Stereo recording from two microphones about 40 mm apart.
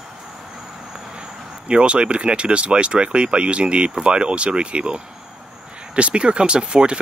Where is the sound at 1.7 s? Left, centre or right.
Right.